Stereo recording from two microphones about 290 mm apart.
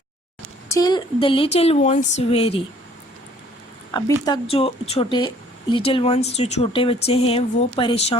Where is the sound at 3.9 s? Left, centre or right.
Centre.